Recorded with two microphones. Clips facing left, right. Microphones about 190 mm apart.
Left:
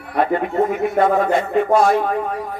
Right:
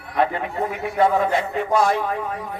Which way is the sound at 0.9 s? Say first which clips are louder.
Right 1 dB; 50° left (ahead or behind).